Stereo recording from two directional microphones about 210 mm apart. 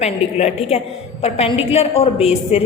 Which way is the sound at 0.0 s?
30° left (ahead or behind).